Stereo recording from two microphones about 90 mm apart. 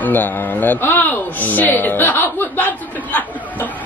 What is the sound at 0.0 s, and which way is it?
A man's voice, 20° left (ahead or behind).